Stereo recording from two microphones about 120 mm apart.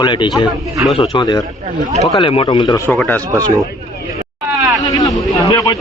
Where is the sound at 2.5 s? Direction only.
40° left (ahead or behind).